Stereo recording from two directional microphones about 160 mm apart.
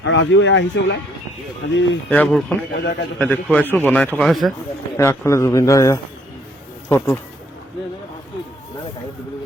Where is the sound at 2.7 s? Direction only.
90° left.